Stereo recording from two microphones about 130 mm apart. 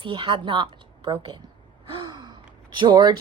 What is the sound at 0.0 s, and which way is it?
A woman's voice, 40° right (ahead or behind).